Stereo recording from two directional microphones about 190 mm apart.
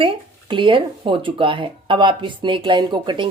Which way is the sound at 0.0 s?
25° right (ahead or behind).